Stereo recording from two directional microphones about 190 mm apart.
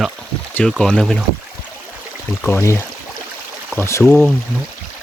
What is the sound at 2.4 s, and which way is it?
Speech, 15° left (ahead or behind).